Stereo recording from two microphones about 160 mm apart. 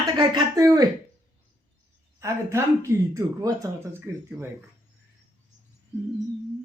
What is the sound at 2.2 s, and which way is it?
Speech, 20° right (ahead or behind).